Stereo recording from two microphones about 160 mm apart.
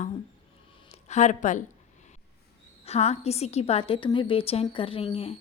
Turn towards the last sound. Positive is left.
turn(degrees=35)  # may be behind; listen again after turning